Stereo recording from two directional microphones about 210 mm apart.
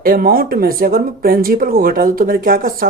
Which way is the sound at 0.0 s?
45° right (ahead or behind).